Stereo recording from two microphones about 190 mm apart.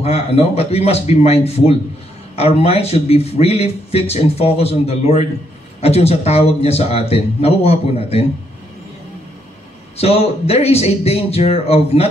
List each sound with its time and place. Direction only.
0.0 s speech: 30° left (ahead or behind)
9.9 s speech: 30° left (ahead or behind)